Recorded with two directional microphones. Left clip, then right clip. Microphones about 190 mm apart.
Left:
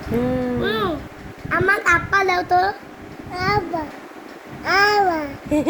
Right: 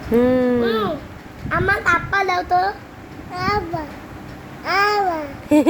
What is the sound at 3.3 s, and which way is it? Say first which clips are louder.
Speech: left 1 dB; 10° right (ahead or behind).